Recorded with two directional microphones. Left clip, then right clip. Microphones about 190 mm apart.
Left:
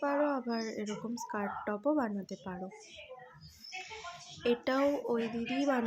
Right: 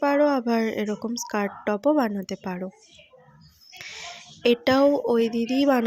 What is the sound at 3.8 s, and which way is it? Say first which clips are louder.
Speech: right 10 dB; 40° right (ahead or behind).